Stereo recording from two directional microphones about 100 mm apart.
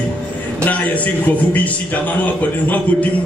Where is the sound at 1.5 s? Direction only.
15° left (ahead or behind).